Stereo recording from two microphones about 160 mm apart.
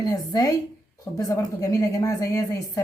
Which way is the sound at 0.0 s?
25° left (ahead or behind).